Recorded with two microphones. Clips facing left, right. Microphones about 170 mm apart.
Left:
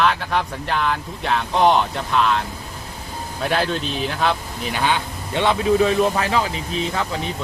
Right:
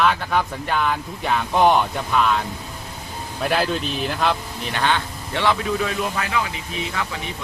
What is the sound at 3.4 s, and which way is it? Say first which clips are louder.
Speech: even; centre (ahead or behind).